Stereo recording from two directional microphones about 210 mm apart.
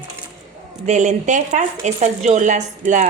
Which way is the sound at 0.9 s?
35° right (ahead or behind).